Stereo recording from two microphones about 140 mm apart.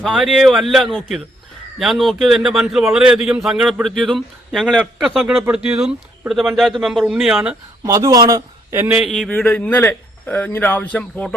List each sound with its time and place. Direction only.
0.0 s a man's voice: centre (ahead or behind)
7.9 s a man's voice: 20° right (ahead or behind)
9.0 s a man's voice: centre (ahead or behind)